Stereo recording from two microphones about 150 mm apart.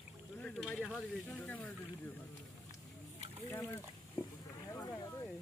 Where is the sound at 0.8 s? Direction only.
5° right (ahead or behind).